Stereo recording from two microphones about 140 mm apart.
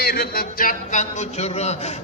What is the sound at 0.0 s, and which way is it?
A man's voice, 90° left.